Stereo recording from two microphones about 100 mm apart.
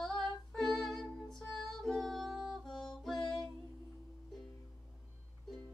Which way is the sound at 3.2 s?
45° left (ahead or behind).